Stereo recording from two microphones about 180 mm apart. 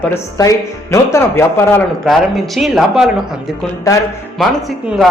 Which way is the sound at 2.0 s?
Centre (ahead or behind).